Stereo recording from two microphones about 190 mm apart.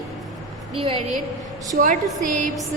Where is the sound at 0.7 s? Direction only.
30° right (ahead or behind).